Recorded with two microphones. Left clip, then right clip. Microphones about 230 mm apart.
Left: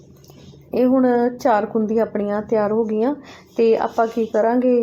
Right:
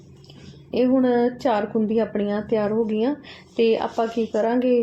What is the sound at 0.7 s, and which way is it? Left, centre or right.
Speech, centre.